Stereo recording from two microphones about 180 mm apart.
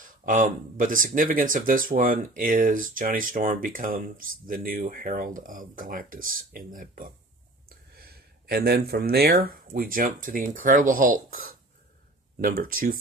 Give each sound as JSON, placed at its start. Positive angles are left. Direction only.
{"t": 0.0, "sound": "speech", "side_deg": -50}